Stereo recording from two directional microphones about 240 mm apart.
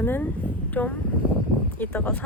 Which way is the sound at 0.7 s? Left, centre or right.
Centre.